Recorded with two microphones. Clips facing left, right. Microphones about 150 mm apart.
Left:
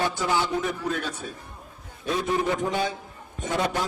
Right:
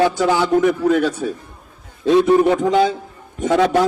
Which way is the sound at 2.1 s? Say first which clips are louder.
Right 12 dB; 75° right (ahead or behind).